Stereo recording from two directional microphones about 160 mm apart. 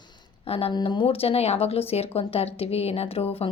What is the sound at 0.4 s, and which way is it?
Speech, 40° left (ahead or behind).